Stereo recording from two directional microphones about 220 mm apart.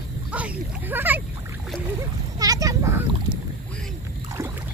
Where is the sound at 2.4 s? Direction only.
15° right (ahead or behind).